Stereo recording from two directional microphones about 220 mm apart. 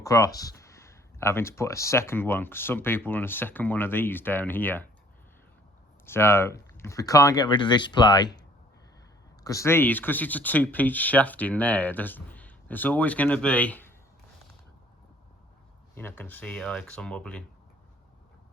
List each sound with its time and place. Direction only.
0.0 s speech: 15° left (ahead or behind)
6.1 s speech: 10° left (ahead or behind)
9.4 s speech: 15° left (ahead or behind)
16.0 s speech: 10° left (ahead or behind)